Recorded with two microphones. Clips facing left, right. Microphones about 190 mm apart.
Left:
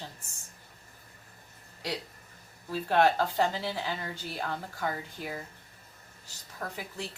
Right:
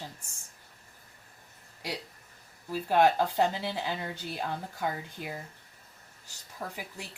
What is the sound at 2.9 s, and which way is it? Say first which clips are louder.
Speech: right 1 dB; 15° right (ahead or behind).